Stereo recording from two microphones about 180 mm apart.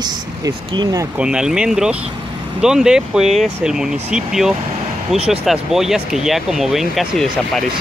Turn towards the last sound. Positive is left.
turn(degrees=0)  # may be behind; listen again after turning